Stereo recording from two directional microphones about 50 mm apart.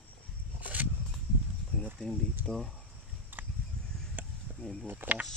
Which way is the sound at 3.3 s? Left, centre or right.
Right.